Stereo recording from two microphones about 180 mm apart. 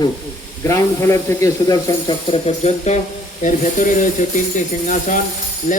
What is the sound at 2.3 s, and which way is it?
Speech, 35° left (ahead or behind).